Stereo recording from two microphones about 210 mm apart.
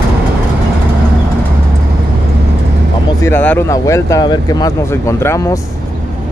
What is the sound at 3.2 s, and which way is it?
Speech, 10° left (ahead or behind).